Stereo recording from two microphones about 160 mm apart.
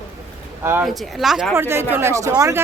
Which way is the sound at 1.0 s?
Centre (ahead or behind).